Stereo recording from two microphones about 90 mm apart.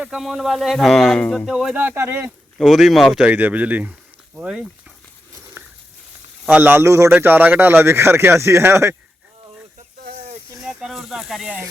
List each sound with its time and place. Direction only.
0.0 s speech: 5° right (ahead or behind)
1.7 s speech: 20° right (ahead or behind)
2.6 s speech: centre (ahead or behind)
3.2 s speech: 15° right (ahead or behind)
5.6 s a sound: 25° right (ahead or behind)
6.5 s speech: 20° right (ahead or behind)
7.1 s speech: 20° right (ahead or behind)
10.7 s speech: 5° right (ahead or behind)